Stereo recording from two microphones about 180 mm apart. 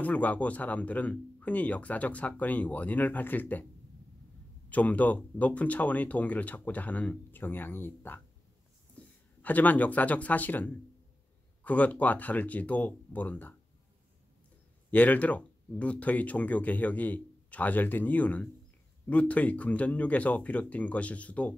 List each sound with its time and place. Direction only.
0.0 s speech: 10° left (ahead or behind)
4.6 s speech: 10° left (ahead or behind)
9.0 s a sound: 5° left (ahead or behind)
9.4 s speech: 10° left (ahead or behind)
14.9 s speech: 10° left (ahead or behind)